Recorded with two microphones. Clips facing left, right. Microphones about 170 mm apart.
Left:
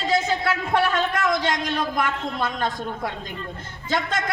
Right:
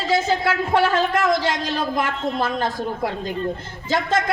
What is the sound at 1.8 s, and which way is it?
Speech, 25° right (ahead or behind).